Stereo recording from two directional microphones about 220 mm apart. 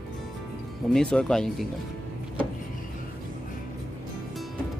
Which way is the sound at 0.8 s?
5° left (ahead or behind).